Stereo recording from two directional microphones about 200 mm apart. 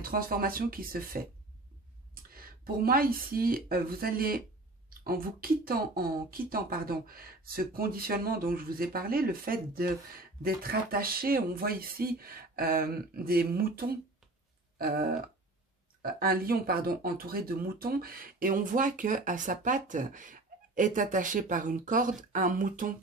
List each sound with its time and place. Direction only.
0.0 s speech: 45° right (ahead or behind)
2.3 s speech: 45° right (ahead or behind)